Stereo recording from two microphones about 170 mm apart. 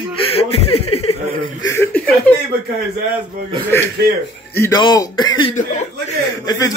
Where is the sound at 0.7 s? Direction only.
35° left (ahead or behind).